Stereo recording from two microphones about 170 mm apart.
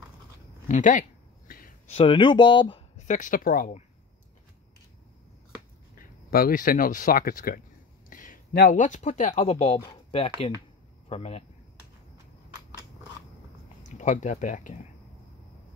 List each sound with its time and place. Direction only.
0.7 s speech: 50° left (ahead or behind)
1.5 s a sound: 55° left (ahead or behind)
1.9 s speech: 35° left (ahead or behind)
3.0 s speech: 45° left (ahead or behind)
5.9 s speech: 55° left (ahead or behind)
8.1 s a sound: 50° left (ahead or behind)
8.6 s speech: 45° left (ahead or behind)
13.8 s speech: 45° left (ahead or behind)